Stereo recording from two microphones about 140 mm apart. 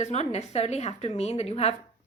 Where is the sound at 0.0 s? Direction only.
55° left (ahead or behind).